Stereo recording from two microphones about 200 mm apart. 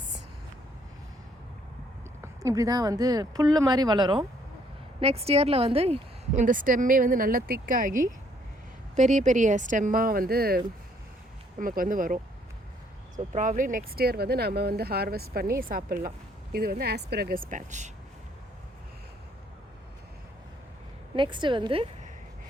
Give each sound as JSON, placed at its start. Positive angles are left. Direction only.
{"t": 2.2, "sound": "speech", "side_deg": -15}
{"t": 11.6, "sound": "speech", "side_deg": -45}
{"t": 21.2, "sound": "speech", "side_deg": -25}